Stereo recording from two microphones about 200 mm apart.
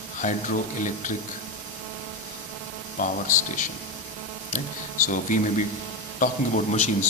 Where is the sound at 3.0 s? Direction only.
40° left (ahead or behind).